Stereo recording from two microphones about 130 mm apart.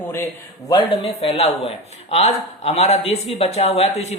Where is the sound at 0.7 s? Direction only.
45° left (ahead or behind).